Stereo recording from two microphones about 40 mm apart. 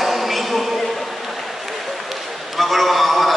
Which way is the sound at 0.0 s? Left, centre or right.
Centre.